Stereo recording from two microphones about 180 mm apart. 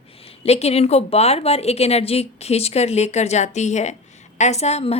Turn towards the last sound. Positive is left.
turn(degrees=35)  # may be behind; listen again after turning